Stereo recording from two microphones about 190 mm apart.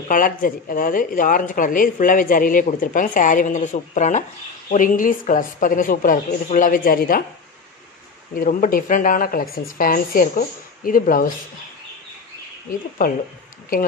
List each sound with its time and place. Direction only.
0.1 s speech: 45° left (ahead or behind)
8.4 s speech: 45° left (ahead or behind)
12.6 s speech: 45° left (ahead or behind)